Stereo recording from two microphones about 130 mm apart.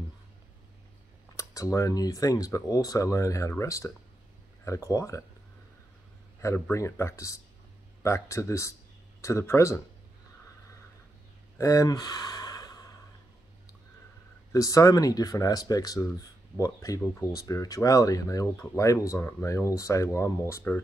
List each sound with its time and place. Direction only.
1.3 s speech: 25° left (ahead or behind)
6.4 s speech: 20° left (ahead or behind)
11.5 s gasp: 25° left (ahead or behind)
14.5 s speech: 25° left (ahead or behind)